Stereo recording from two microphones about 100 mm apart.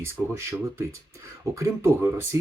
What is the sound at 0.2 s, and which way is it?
Speech, 5° right (ahead or behind).